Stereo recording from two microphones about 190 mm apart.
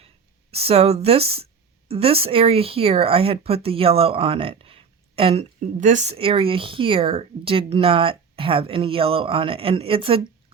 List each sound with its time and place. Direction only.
0.5 s speech: 30° right (ahead or behind)